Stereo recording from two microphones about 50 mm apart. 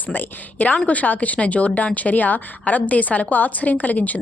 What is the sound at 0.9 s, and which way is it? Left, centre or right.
A woman's voice, left.